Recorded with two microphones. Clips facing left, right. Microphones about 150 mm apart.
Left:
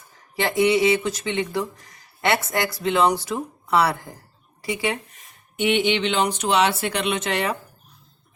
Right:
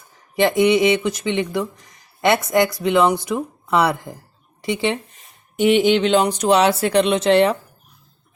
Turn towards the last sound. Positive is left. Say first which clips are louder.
# right 9 dB
turn(degrees=-30)  # may be behind; listen again after turning